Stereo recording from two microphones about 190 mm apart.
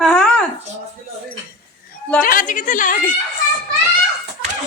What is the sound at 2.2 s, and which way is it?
Speech, 45° left (ahead or behind).